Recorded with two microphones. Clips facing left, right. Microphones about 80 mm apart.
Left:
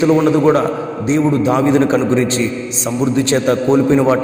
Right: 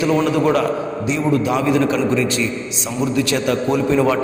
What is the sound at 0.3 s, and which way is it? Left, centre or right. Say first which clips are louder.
A man's voice: left 4 dB; left.